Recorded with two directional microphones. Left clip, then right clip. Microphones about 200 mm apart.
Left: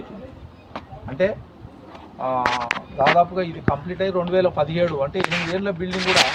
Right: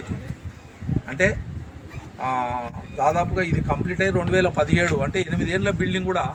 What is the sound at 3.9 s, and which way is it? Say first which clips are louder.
A man's voice: right 1 dB; 5° right (ahead or behind).